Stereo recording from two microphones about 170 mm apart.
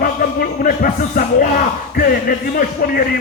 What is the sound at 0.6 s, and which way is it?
Speech, 55° left (ahead or behind).